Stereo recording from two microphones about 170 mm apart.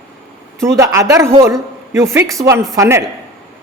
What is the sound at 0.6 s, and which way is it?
A man's voice, 15° right (ahead or behind).